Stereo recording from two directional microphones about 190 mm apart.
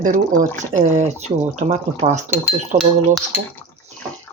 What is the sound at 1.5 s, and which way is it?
Speech, 40° right (ahead or behind).